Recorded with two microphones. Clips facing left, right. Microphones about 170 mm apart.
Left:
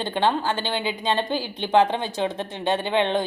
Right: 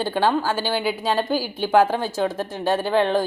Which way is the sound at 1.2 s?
25° left (ahead or behind).